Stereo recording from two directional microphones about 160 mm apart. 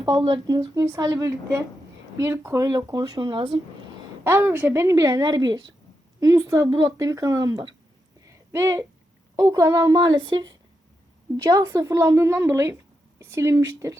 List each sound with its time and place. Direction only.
0.0 s speech: 30° right (ahead or behind)
4.2 s speech: 15° right (ahead or behind)
8.3 s a sound: 15° right (ahead or behind)
9.3 s speech: 20° right (ahead or behind)